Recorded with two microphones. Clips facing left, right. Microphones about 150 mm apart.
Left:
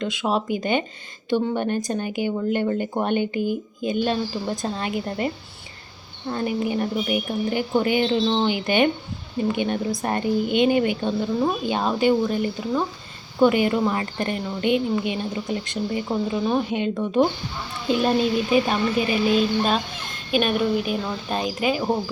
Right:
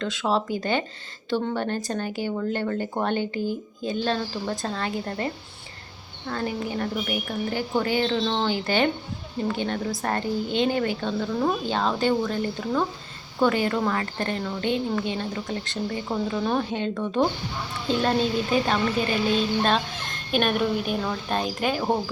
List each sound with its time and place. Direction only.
0.0 s a woman's voice: 15° left (ahead or behind)